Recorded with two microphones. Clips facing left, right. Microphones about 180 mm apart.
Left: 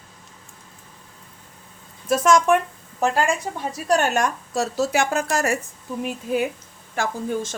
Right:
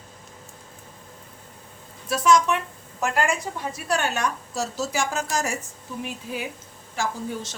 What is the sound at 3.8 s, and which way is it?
A woman's voice, 45° left (ahead or behind).